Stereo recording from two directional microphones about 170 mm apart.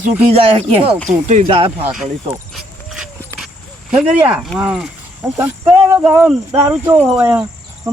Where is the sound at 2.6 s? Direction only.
5° right (ahead or behind).